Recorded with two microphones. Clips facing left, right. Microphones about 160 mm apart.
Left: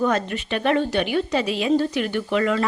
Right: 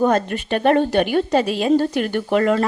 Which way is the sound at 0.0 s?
45° right (ahead or behind).